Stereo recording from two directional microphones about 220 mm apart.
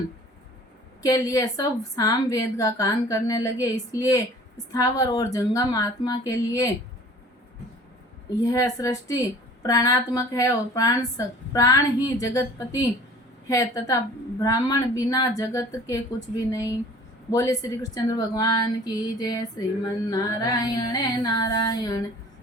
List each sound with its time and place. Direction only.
1.0 s a woman's voice: 15° left (ahead or behind)
8.4 s a woman's voice: 15° left (ahead or behind)